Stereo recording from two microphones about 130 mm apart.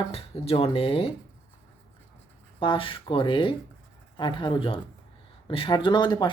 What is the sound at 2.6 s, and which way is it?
Speech, 40° left (ahead or behind).